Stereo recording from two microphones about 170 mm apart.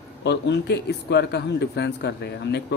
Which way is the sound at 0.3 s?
90° left.